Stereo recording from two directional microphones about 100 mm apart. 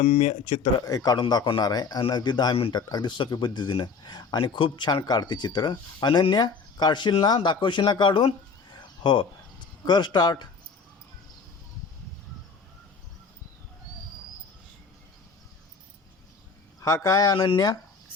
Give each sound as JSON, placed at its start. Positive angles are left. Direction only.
{"t": 0.2, "sound": "speech", "side_deg": 90}
{"t": 0.8, "sound": "speech", "side_deg": 40}
{"t": 16.8, "sound": "speech", "side_deg": 35}